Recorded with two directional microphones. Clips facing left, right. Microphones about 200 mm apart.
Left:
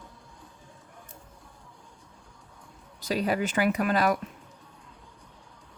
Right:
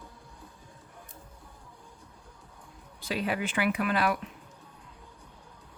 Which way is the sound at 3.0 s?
40° left (ahead or behind).